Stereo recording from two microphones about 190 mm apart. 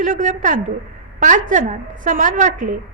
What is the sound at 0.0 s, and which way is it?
A woman's voice, 45° right (ahead or behind).